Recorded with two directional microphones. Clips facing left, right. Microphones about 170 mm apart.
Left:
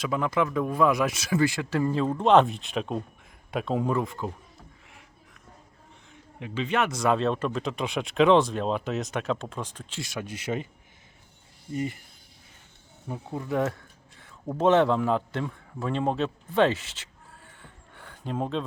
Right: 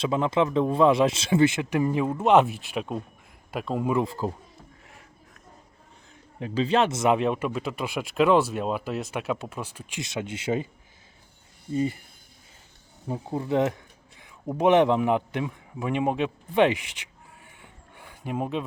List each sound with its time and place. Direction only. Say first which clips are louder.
0.0 s a man's voice: right 3 dB; 25° right (ahead or behind); by 3.9 s centre (ahead or behind)
4.0 s speech: right 4 dB; 35° right (ahead or behind)
6.4 s speech: right 4 dB; 35° right (ahead or behind); by 10.0 s 10° right (ahead or behind)
10.0 s a man's voice: right 3 dB; 20° right (ahead or behind)
11.7 s a man's voice: right 4 dB; 25° right (ahead or behind)
13.1 s a man's voice: right 4 dB; 35° right (ahead or behind); by 18.6 s 10° right (ahead or behind)